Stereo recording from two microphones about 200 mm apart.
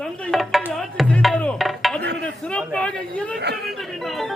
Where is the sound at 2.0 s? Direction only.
55° right (ahead or behind).